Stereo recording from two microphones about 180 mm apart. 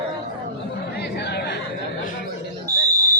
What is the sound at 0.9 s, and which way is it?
Chatter, 65° left (ahead or behind).